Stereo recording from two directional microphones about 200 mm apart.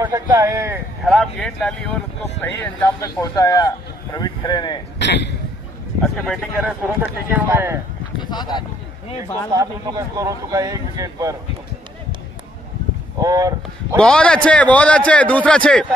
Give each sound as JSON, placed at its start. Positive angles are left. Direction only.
{"t": 0.0, "sound": "speech", "side_deg": -15}
{"t": 1.0, "sound": "a man's voice", "side_deg": 0}
{"t": 4.9, "sound": "a man's voice", "side_deg": 60}
{"t": 6.0, "sound": "speech", "side_deg": 0}
{"t": 8.2, "sound": "speech", "side_deg": 20}
{"t": 9.2, "sound": "speech", "side_deg": -15}
{"t": 13.2, "sound": "speech", "side_deg": -15}
{"t": 13.9, "sound": "a man's voice", "side_deg": 5}